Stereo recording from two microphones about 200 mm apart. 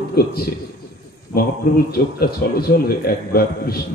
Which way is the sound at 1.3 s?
50° left (ahead or behind).